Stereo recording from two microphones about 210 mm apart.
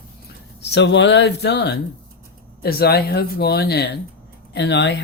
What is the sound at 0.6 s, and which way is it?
Speech, 55° left (ahead or behind).